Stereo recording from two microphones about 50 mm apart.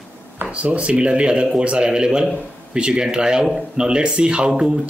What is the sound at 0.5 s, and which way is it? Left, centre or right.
Speech, right.